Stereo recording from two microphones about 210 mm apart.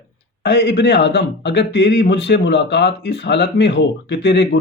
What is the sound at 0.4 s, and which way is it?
Speech, 55° left (ahead or behind).